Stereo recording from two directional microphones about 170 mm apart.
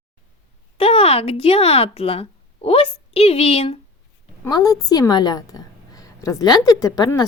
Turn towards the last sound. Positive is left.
turn(degrees=20)  # may be behind; listen again after turning